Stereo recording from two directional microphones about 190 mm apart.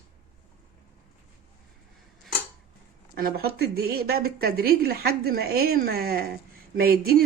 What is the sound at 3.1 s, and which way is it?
A woman's voice, 50° right (ahead or behind).